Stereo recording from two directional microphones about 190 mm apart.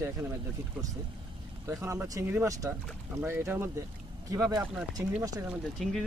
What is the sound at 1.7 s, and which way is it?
Speech, 15° right (ahead or behind).